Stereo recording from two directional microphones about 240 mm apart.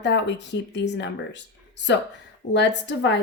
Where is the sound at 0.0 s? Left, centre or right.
Left.